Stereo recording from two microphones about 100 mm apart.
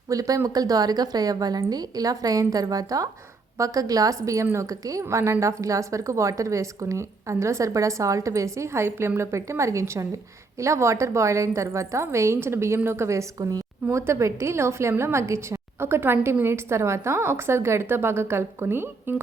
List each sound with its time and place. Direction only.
0.1 s a woman's voice: 35° right (ahead or behind)